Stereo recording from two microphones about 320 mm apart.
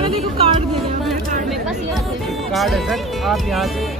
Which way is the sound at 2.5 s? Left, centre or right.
Centre.